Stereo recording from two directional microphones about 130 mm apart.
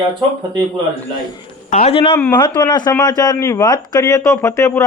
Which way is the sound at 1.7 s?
65° left (ahead or behind).